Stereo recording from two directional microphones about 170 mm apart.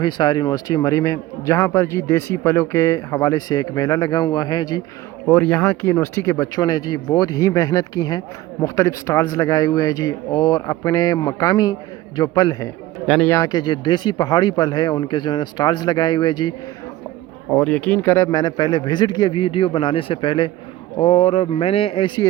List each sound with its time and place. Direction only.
0.0 s a man's voice: 25° left (ahead or behind)
5.2 s a man's voice: 10° left (ahead or behind); by 16.6 s 25° left (ahead or behind)
17.5 s a man's voice: 5° left (ahead or behind); by 22.3 s 30° left (ahead or behind)